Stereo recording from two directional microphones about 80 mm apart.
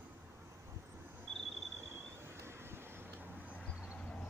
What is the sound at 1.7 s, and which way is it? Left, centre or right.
Vehicle, right.